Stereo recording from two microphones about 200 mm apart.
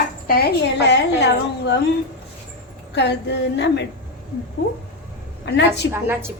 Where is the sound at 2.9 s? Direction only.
60° left (ahead or behind).